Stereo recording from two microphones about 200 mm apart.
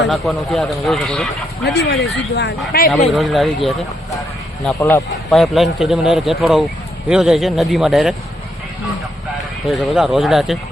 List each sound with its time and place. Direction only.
0.0 s speech: centre (ahead or behind)
1.6 s speech: 55° left (ahead or behind)
3.1 s speech: centre (ahead or behind)
4.8 s a man's voice: 15° left (ahead or behind)
5.3 s speech: centre (ahead or behind)
9.6 s speech: centre (ahead or behind)